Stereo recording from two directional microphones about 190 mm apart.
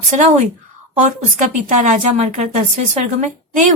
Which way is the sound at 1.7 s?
40° right (ahead or behind).